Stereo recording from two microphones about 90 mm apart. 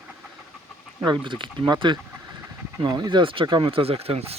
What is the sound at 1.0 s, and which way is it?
Speech, 60° right (ahead or behind).